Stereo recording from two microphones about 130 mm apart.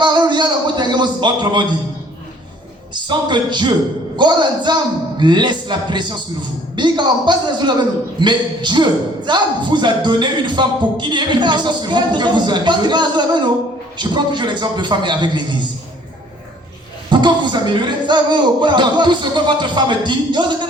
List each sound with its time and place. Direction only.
0.0 s a sound: 35° right (ahead or behind)
2.9 s a man's voice: 35° right (ahead or behind)
17.1 s a man's voice: 35° right (ahead or behind)